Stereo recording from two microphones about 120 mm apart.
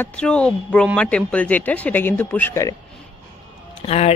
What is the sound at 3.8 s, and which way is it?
Speech, 65° left (ahead or behind).